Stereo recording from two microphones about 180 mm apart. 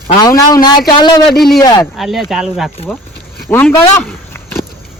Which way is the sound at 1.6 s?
20° left (ahead or behind).